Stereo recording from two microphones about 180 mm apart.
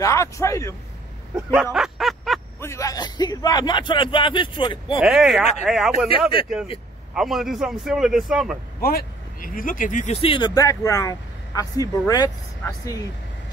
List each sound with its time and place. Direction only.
0.0 s a man's voice: 15° left (ahead or behind)
1.3 s a sound: 5° right (ahead or behind)
2.6 s speech: 15° left (ahead or behind)
5.0 s a man's voice: centre (ahead or behind)
7.2 s a man's voice: centre (ahead or behind)
8.8 s speech: 55° left (ahead or behind)
10.2 s speech: 25° left (ahead or behind)